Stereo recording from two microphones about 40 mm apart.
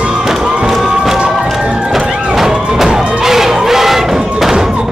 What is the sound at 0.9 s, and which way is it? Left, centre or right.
Music, centre.